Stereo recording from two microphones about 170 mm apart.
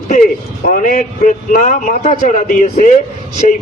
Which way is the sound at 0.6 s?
50° left (ahead or behind).